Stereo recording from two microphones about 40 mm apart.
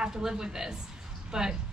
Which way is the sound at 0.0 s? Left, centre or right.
Centre.